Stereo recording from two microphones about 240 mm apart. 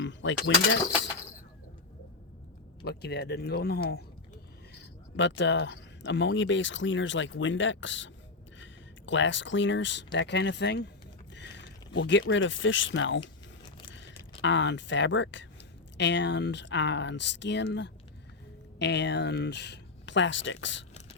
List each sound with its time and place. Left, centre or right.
0.0 s speech: left
2.8 s speech: left
11.3 s rowboat: left
11.9 s speech: left
14.4 s speech: left